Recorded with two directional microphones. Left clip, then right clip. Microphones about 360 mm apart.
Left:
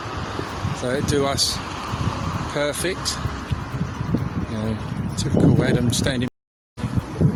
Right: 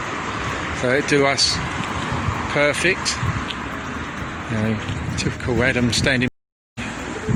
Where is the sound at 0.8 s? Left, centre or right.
Left.